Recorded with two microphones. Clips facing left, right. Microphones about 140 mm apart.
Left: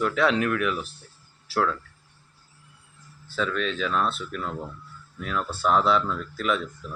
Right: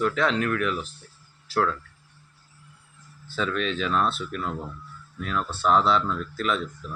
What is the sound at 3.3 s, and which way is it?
Speech, 5° right (ahead or behind).